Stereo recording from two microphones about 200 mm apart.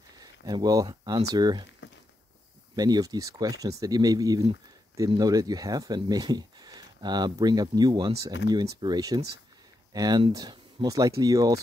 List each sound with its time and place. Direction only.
0.2 s speech: 20° right (ahead or behind)
2.7 s speech: 20° right (ahead or behind)